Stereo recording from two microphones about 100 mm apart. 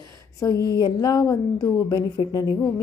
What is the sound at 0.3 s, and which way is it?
Speech, 35° left (ahead or behind).